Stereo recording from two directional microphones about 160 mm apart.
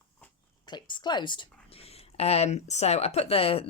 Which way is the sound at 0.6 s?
25° left (ahead or behind).